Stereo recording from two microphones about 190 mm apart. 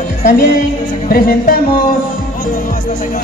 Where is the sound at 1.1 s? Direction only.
50° left (ahead or behind).